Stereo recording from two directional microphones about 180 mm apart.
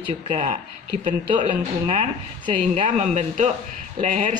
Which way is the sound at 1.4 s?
40° right (ahead or behind).